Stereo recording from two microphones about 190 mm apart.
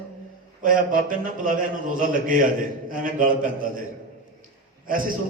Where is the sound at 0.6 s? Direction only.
45° right (ahead or behind).